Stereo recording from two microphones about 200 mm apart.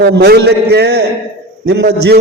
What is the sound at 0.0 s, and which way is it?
A man's voice, 55° right (ahead or behind).